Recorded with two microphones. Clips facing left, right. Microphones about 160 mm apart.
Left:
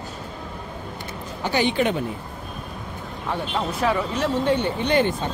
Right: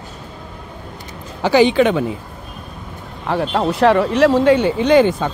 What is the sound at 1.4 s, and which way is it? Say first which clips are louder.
Speech: right 9 dB; 90° right.